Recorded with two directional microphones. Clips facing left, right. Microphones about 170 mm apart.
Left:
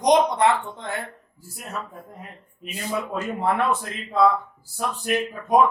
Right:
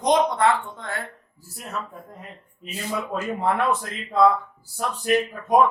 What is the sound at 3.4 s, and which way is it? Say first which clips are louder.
A man's voice: even; 5° left (ahead or behind).